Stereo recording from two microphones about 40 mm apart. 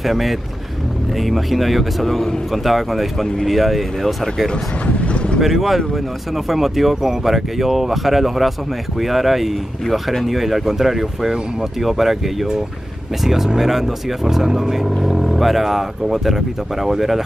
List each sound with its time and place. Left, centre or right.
0.0 s speech: centre
4.8 s vehicle: left
5.4 s speech: centre
13.2 s speech: centre